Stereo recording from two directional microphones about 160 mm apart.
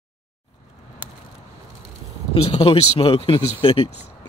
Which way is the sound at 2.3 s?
40° left (ahead or behind).